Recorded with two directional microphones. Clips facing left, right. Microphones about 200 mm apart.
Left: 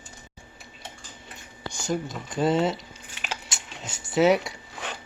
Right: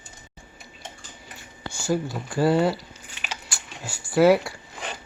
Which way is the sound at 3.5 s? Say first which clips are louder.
Right 1 dB; 20° left (ahead or behind).